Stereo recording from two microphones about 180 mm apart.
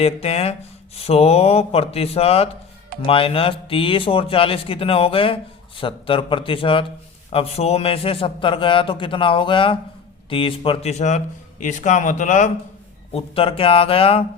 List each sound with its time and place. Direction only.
0.0 s a man's voice: 35° left (ahead or behind)
13.1 s speech: 30° left (ahead or behind)